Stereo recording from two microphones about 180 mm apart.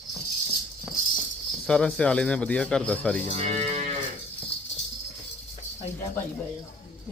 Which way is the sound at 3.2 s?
40° right (ahead or behind).